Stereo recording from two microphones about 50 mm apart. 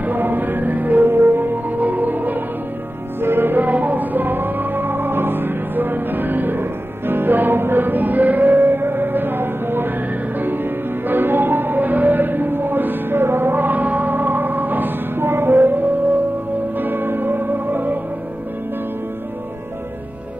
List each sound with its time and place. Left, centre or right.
0.0 s music: right
3.2 s music: right
16.7 s music: right